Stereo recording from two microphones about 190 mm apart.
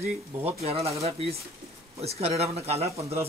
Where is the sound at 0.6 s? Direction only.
30° right (ahead or behind).